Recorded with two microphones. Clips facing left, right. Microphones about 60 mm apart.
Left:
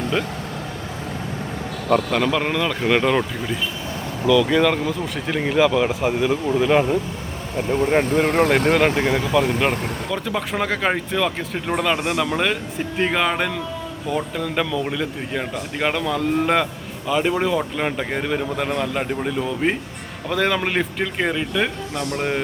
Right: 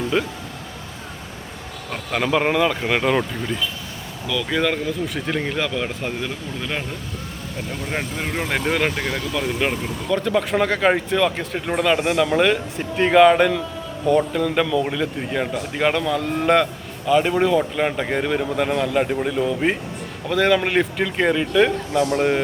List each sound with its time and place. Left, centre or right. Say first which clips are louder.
0.1 s speech: right 2 dB; centre
2.0 s speech: even; centre
8.0 s speech: left 8 dB; left
9.0 s speech: left 6 dB; left
9.7 s speech: left 1 dB; left
10.1 s speech: right 7 dB; centre